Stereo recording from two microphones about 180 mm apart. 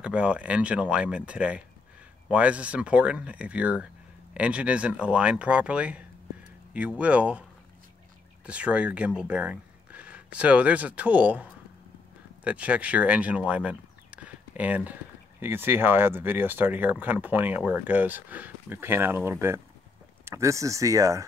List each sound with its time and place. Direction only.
0.0 s speech: 5° right (ahead or behind)
8.5 s speech: 5° right (ahead or behind)
12.4 s speech: 5° right (ahead or behind)